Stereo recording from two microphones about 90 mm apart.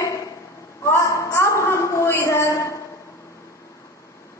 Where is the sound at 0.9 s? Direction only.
35° left (ahead or behind).